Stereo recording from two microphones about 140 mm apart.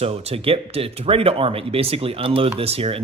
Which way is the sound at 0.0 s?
45° right (ahead or behind).